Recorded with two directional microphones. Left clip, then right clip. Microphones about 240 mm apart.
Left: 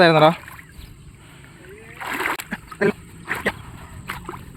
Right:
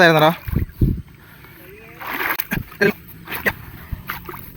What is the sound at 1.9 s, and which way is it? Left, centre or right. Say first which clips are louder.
Splash: right 1 dB; centre.